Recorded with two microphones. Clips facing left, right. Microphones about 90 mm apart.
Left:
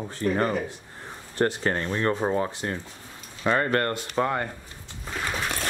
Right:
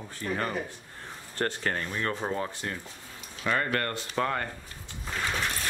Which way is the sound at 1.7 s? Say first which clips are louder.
Left 6 dB; 30° left (ahead or behind).